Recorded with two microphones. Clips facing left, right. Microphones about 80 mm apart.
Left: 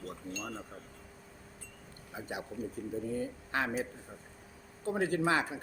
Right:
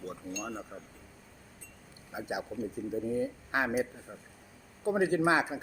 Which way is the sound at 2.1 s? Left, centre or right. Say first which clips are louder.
Right 4 dB; centre.